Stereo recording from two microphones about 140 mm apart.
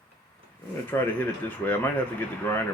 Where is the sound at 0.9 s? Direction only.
15° left (ahead or behind).